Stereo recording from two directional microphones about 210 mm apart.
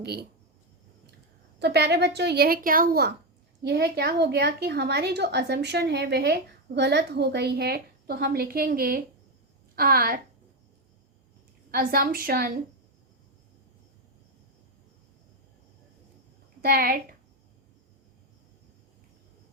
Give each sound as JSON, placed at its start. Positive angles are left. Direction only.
{"t": 0.0, "sound": "a woman's voice", "side_deg": -50}
{"t": 1.5, "sound": "a woman's voice", "side_deg": -50}
{"t": 11.7, "sound": "a woman's voice", "side_deg": -45}
{"t": 16.6, "sound": "a woman's voice", "side_deg": -45}